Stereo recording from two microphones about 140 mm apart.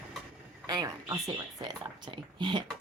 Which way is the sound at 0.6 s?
25° right (ahead or behind).